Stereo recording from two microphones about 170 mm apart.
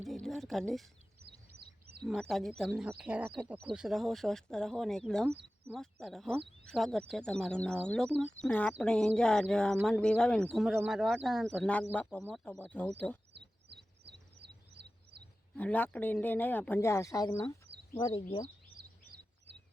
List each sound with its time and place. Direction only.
0.0 s a sound: centre (ahead or behind)
2.0 s speech: centre (ahead or behind)
14.1 s bird: 75° right (ahead or behind)
15.5 s speech: 10° left (ahead or behind)
17.7 s a sound: 85° right
18.0 s speech: 30° left (ahead or behind)